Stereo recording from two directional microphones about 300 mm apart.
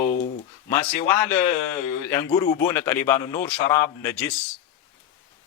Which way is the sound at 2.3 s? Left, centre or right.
Centre.